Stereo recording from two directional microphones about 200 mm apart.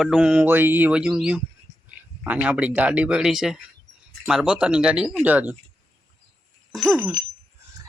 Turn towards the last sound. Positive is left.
turn(degrees=0)  # may be behind; listen again after turning